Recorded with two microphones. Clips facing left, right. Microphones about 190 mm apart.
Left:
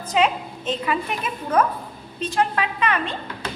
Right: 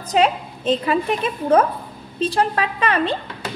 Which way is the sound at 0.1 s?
35° right (ahead or behind).